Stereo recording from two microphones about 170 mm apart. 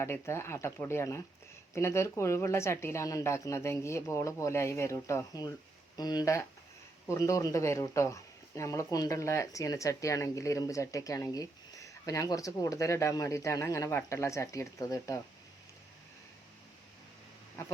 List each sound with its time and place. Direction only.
0.0 s speech: 15° left (ahead or behind)